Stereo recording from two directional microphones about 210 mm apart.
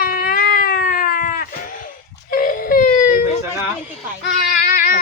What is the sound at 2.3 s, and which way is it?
Wail, 40° left (ahead or behind).